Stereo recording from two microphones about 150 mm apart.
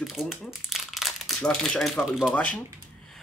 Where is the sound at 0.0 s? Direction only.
Centre (ahead or behind).